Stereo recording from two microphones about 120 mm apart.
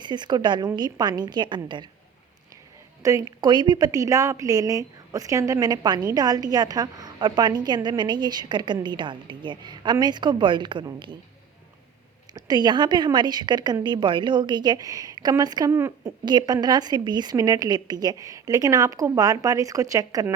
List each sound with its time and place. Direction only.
0.0 s a woman's voice: 40° right (ahead or behind)
3.0 s a woman's voice: 25° right (ahead or behind)
12.3 s a woman's voice: 35° right (ahead or behind)